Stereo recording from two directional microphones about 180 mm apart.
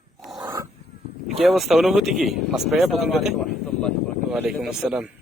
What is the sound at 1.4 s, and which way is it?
Speech, centre (ahead or behind).